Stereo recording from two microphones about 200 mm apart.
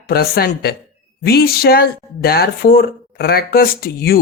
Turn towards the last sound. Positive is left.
turn(degrees=50)  # may be behind; listen again after turning